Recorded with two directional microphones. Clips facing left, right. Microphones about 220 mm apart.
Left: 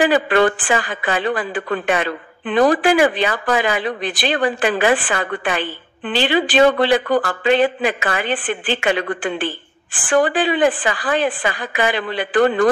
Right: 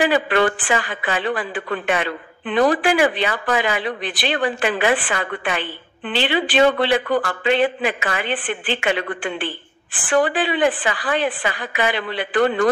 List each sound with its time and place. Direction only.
0.0 s a woman's voice: 40° left (ahead or behind)